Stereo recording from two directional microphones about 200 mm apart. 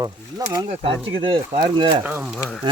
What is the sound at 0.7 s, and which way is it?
Speech, 30° right (ahead or behind).